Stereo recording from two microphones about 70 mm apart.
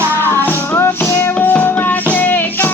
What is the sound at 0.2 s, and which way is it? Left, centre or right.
Music, left.